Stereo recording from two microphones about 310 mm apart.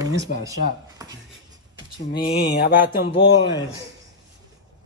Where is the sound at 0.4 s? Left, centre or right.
Centre.